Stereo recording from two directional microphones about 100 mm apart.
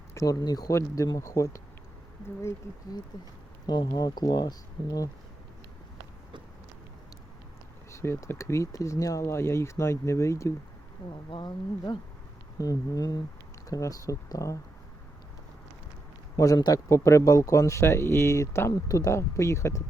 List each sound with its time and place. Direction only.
0.1 s speech: 35° left (ahead or behind)
3.7 s speech: 45° left (ahead or behind)
7.9 s speech: 30° left (ahead or behind)
11.3 s speech: 50° left (ahead or behind)
12.5 s speech: 35° left (ahead or behind)
16.4 s speech: 40° left (ahead or behind)